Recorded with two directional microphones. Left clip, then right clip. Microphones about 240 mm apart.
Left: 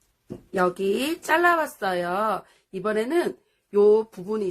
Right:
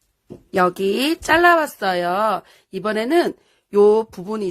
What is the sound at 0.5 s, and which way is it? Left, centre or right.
Speech, right.